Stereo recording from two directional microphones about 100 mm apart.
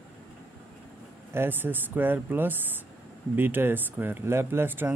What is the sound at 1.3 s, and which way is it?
Speech, 20° right (ahead or behind).